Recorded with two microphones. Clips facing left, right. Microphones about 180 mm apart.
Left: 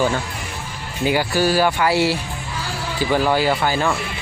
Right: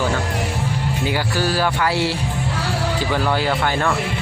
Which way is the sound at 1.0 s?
15° left (ahead or behind).